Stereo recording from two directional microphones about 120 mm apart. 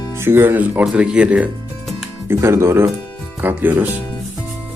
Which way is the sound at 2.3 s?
20° right (ahead or behind).